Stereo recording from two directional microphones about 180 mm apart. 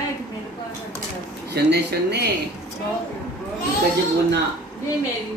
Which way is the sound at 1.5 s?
65° right (ahead or behind).